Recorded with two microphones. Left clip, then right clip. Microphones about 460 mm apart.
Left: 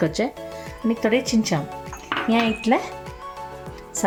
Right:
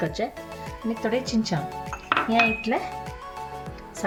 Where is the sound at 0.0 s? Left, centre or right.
Centre.